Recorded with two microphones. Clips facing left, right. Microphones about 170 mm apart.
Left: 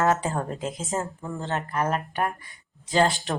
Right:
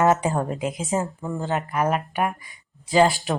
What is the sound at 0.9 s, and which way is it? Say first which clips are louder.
A woman's voice: right 5 dB; 15° right (ahead or behind).